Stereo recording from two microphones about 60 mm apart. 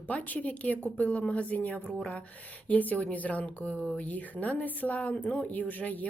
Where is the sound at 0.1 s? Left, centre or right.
Left.